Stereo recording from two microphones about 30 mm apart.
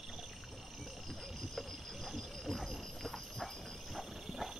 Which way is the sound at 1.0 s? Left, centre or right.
Centre.